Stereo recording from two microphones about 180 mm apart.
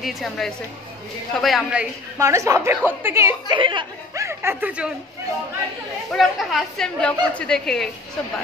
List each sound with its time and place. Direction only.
0.0 s a woman's voice: centre (ahead or behind)
2.1 s a woman's voice: 15° right (ahead or behind)
3.5 s speech: 25° right (ahead or behind)
4.1 s a woman's voice: 15° right (ahead or behind)
6.1 s a woman's voice: centre (ahead or behind)